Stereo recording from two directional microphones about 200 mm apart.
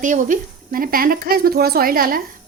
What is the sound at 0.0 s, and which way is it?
Speech, 40° right (ahead or behind).